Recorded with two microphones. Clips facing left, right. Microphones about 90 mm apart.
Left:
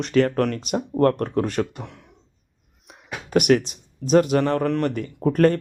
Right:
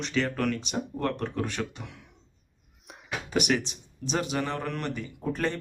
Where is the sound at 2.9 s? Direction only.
Centre (ahead or behind).